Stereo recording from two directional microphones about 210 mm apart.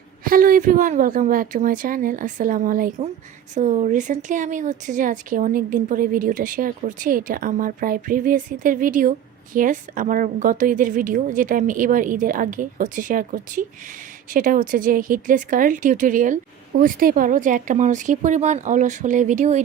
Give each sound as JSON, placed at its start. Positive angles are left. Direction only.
{"t": 0.3, "sound": "speech", "side_deg": -40}